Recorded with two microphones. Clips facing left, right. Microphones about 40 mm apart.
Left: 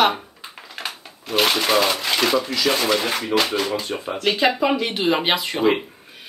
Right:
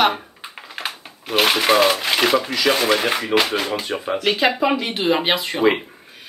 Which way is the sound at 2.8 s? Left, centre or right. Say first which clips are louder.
Right 2 dB; right.